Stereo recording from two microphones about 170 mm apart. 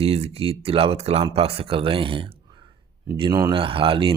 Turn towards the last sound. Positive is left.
turn(degrees=-30)  # may be behind; listen again after turning